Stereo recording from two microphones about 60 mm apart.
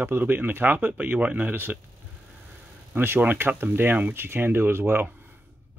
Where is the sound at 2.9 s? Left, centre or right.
Right.